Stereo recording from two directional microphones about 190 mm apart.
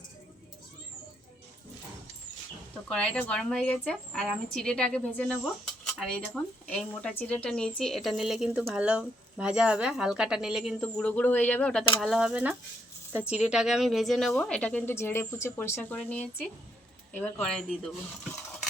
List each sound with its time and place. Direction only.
2.9 s a woman's voice: 5° left (ahead or behind)